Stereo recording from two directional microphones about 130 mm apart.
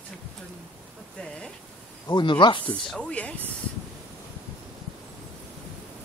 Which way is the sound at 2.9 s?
10° left (ahead or behind).